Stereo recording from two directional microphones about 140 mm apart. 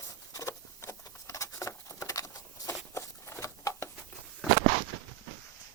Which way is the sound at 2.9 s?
20° left (ahead or behind).